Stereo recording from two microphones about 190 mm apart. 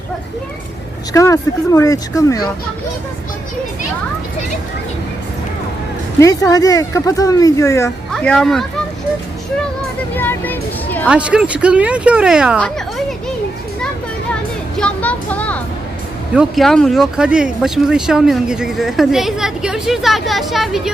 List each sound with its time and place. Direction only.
1.1 s speech: 15° left (ahead or behind)
6.1 s speech: 15° left (ahead or behind)
8.1 s speech: 5° left (ahead or behind)
10.2 s speech: 10° left (ahead or behind)
11.1 s speech: 5° right (ahead or behind)
14.8 s a sound: 5° left (ahead or behind)
16.3 s speech: centre (ahead or behind)